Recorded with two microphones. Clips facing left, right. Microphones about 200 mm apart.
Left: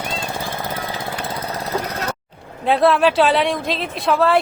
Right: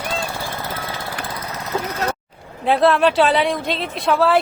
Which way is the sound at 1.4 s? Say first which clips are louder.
Left 1 dB; 30° left (ahead or behind).